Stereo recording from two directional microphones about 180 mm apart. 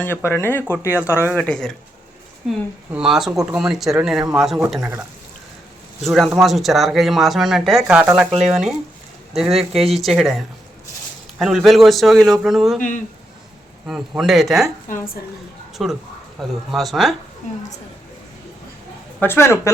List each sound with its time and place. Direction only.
0.0 s speech: 10° left (ahead or behind)
6.0 s speech: centre (ahead or behind)
7.8 s speech: 10° right (ahead or behind)
13.8 s speech: 5° right (ahead or behind)
15.8 s speech: centre (ahead or behind)
19.2 s speech: 15° left (ahead or behind)